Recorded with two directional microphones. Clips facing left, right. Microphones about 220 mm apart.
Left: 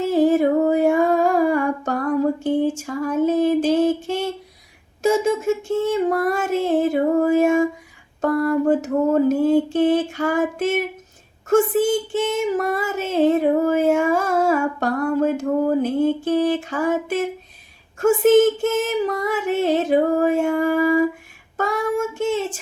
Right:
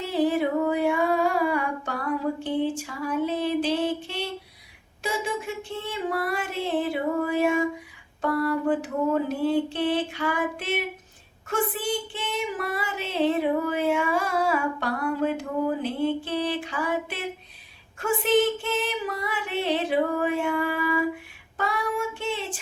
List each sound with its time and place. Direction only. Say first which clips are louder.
0.0 s humming: left 7 dB; 45° left (ahead or behind)
5.0 s female singing: left 11 dB; 45° left (ahead or behind)
21.6 s child singing: left 6 dB; 45° left (ahead or behind)